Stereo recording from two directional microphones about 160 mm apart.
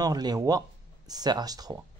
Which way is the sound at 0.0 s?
25° right (ahead or behind).